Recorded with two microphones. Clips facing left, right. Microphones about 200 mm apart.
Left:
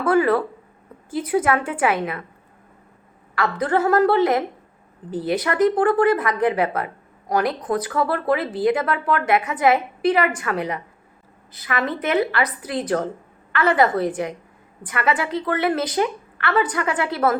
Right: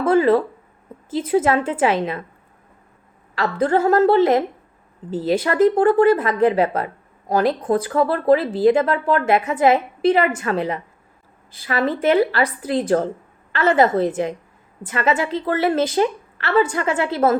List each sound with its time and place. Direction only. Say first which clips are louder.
0.0 s a woman's voice: right 3 dB; 25° right (ahead or behind)
3.3 s a woman's voice: right 2 dB; 25° right (ahead or behind)